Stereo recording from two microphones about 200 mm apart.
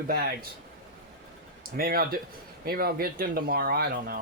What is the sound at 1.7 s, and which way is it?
Speech, 50° right (ahead or behind).